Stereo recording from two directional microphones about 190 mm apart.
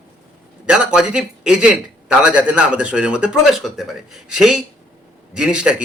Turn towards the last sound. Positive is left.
turn(degrees=-5)  # may be behind; listen again after turning